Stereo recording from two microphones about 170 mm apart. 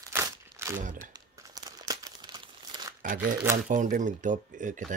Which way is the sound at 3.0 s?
50° right (ahead or behind).